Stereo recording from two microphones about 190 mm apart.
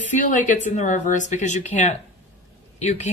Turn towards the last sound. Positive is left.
turn(degrees=35)  # may be behind; listen again after turning